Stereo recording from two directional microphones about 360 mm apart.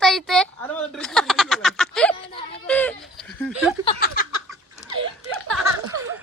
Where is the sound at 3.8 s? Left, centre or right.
Centre.